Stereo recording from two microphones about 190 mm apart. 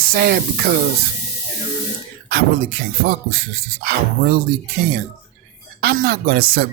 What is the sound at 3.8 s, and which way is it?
Speech, 60° right (ahead or behind).